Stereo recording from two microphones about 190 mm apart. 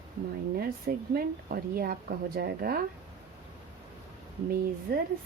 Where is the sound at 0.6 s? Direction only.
55° right (ahead or behind).